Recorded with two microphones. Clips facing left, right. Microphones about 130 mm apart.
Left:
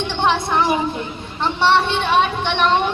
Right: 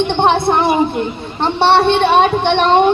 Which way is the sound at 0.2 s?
55° right (ahead or behind).